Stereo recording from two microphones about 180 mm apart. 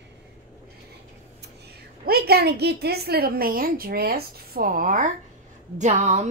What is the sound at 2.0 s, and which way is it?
A woman's voice, 60° right (ahead or behind).